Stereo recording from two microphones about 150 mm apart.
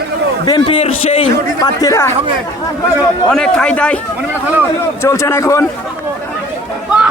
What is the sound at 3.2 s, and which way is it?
Speech, 5° left (ahead or behind).